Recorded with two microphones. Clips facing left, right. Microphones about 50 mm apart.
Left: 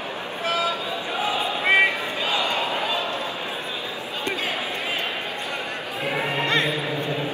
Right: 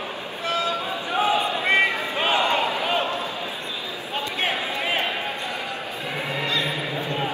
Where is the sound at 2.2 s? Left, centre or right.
Right.